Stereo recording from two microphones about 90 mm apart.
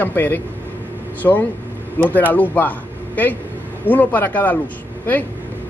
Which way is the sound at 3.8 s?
20° left (ahead or behind).